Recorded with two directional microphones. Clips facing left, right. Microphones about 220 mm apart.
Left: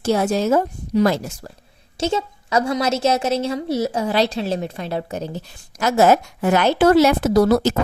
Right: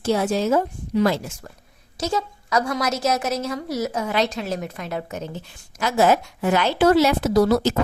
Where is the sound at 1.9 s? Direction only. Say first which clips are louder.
Left 3 dB; 25° left (ahead or behind).